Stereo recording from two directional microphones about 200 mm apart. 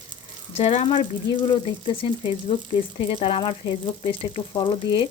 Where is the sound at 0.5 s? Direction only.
35° left (ahead or behind).